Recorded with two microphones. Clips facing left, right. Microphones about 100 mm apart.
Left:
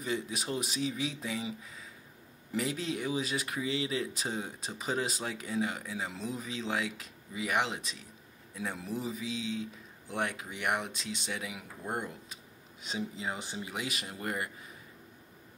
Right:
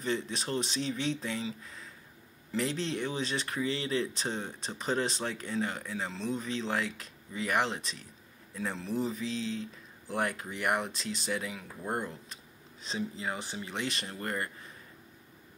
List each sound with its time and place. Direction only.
0.0 s speech: 5° left (ahead or behind)
13.2 s speech: 15° left (ahead or behind)
13.7 s speech: 5° left (ahead or behind)